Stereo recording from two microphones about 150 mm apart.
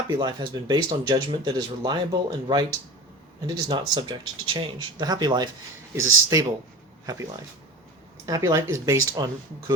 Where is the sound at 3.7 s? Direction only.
30° right (ahead or behind).